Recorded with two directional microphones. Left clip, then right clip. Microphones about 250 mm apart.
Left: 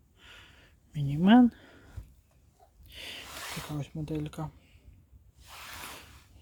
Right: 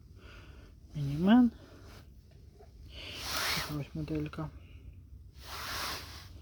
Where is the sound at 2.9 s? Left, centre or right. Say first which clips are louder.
Left 2 dB; left.